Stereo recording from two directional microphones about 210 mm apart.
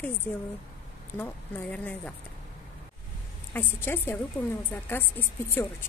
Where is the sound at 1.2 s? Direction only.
10° left (ahead or behind).